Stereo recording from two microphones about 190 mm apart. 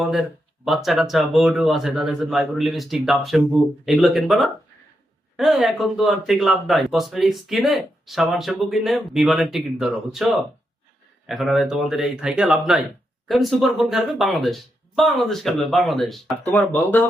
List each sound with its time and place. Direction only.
0.0 s speech: centre (ahead or behind)